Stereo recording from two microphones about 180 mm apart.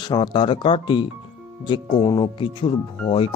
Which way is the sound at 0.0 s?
25° left (ahead or behind).